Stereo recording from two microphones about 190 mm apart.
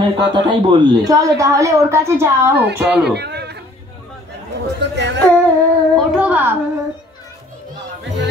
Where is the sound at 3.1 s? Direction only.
60° right (ahead or behind).